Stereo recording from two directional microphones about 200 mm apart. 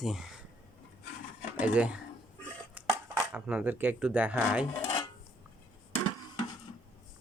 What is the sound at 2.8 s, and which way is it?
Dishes, 5° right (ahead or behind).